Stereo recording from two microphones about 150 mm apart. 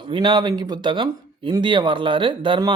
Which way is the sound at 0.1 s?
30° right (ahead or behind).